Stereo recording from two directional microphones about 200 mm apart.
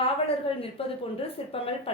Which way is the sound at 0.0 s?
30° left (ahead or behind).